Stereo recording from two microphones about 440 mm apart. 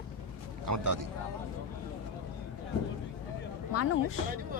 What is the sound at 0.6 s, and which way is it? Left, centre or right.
Speech, right.